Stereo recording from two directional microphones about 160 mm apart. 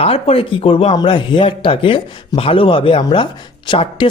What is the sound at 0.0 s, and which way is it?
Speech, 40° left (ahead or behind).